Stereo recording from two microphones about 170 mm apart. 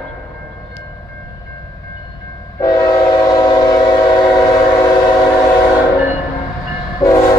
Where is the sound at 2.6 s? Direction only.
20° left (ahead or behind).